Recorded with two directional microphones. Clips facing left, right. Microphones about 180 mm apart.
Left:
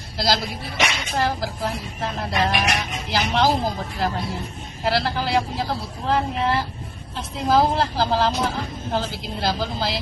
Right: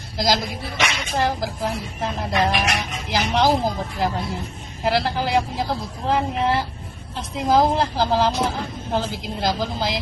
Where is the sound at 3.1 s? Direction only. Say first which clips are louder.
Right 1 dB; 15° right (ahead or behind).